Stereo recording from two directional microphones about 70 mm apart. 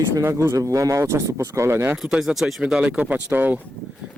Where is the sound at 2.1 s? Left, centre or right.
Centre; by 3.5 s right.